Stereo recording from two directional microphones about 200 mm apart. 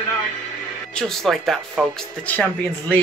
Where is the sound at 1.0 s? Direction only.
Centre (ahead or behind).